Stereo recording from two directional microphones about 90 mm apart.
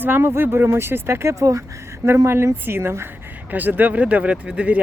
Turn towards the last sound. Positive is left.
turn(degrees=-15)  # may be behind; listen again after turning